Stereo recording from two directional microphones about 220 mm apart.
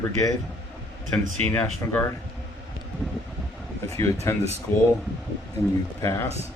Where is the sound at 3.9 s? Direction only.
15° left (ahead or behind).